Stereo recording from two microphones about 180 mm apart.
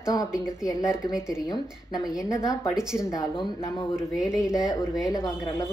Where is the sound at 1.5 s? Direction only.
20° left (ahead or behind).